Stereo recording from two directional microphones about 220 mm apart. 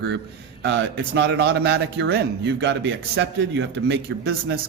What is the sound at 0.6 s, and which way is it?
A man's voice, 50° right (ahead or behind).